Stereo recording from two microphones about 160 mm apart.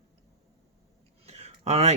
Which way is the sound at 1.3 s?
40° right (ahead or behind).